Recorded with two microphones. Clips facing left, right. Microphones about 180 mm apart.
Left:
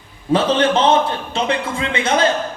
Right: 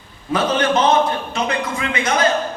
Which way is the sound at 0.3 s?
30° left (ahead or behind).